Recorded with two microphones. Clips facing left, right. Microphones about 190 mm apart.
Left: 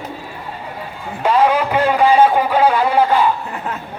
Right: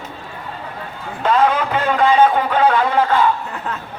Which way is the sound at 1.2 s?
10° left (ahead or behind).